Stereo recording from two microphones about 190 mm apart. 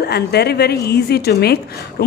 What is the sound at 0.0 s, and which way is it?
A woman's voice, 60° left (ahead or behind).